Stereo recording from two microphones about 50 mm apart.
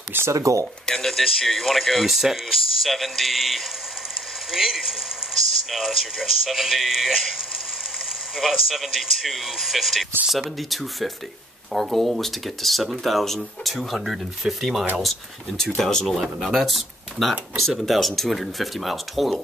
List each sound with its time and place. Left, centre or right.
0.3 s speech: right
0.8 s speech: centre
8.4 s speech: centre